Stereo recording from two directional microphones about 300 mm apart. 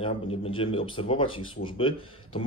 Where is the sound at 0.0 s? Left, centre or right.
Centre.